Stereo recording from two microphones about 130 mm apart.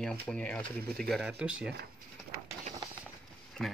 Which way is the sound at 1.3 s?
10° right (ahead or behind).